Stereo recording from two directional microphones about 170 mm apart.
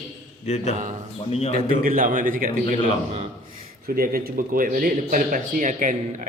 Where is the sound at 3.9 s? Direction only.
60° right (ahead or behind).